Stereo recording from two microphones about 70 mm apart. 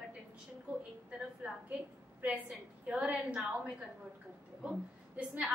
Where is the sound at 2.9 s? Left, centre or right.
Centre.